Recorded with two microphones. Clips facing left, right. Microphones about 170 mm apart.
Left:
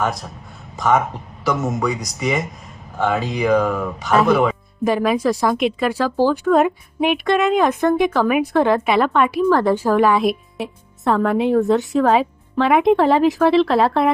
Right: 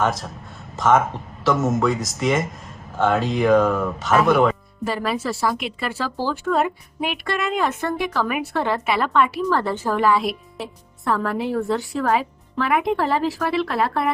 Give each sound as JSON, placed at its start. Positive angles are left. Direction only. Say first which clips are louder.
{"t": 0.0, "sound": "a man's voice", "louder": "even", "side_deg": 0}
{"t": 4.8, "sound": "a woman's voice", "louder": "left 8 dB", "side_deg": 15}